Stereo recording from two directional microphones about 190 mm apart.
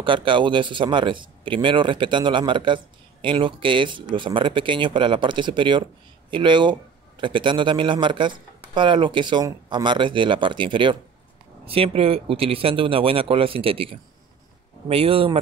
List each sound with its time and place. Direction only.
0.0 s speech: 25° right (ahead or behind)